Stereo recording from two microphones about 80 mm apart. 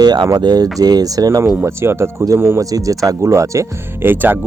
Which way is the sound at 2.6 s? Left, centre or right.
Right.